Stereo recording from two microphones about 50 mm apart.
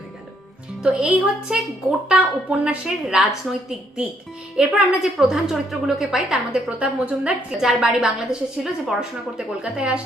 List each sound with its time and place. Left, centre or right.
0.8 s a woman's voice: centre
4.5 s a woman's voice: centre
5.1 s a woman's voice: centre; by 7.3 s right
7.6 s a woman's voice: centre